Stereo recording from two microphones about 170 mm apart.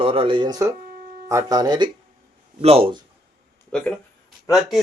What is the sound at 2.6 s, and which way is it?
Speech, 35° right (ahead or behind).